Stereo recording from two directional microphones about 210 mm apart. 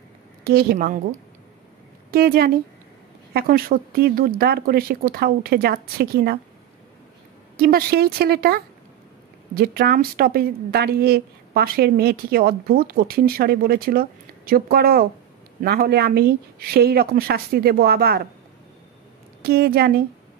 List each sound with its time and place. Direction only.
0.4 s speech: 45° right (ahead or behind)
2.0 s a woman's voice: 45° right (ahead or behind)
7.5 s speech: 45° right (ahead or behind)
19.4 s speech: 45° right (ahead or behind)